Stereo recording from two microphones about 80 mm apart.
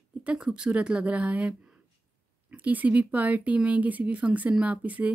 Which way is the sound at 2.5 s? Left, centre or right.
Right.